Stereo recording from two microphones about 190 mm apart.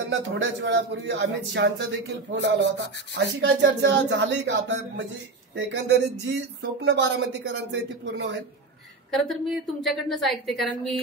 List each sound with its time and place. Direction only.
0.1 s speech: 75° right (ahead or behind)
9.1 s a woman's voice: 5° left (ahead or behind)